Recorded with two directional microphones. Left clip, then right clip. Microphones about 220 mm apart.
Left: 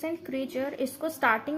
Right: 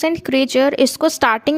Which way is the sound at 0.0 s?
40° right (ahead or behind).